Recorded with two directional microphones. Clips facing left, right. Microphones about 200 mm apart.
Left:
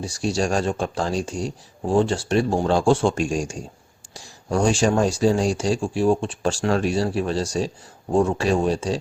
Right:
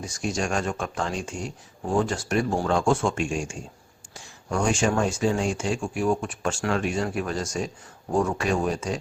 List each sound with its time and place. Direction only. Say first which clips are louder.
0.0 s speech: left 5 dB; 30° left (ahead or behind)